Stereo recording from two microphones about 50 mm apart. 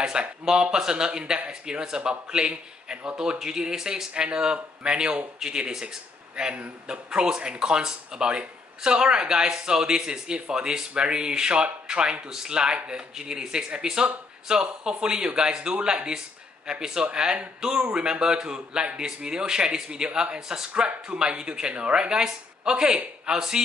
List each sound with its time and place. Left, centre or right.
0.0 s speech: centre